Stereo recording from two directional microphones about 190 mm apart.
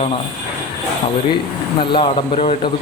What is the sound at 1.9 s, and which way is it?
Speech, 25° left (ahead or behind).